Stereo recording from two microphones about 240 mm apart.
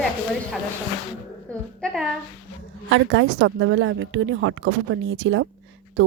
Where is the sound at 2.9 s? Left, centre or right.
Right.